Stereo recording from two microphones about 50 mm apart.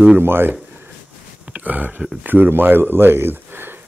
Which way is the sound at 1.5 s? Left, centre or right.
Right.